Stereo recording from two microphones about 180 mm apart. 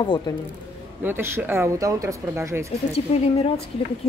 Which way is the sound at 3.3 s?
35° left (ahead or behind).